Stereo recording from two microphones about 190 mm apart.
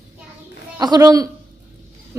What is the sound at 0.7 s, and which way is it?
Speech, 20° right (ahead or behind).